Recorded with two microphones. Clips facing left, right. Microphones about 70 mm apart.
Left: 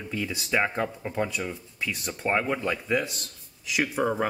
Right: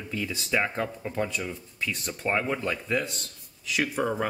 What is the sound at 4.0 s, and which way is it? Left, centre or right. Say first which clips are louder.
Speech: left 3 dB; centre.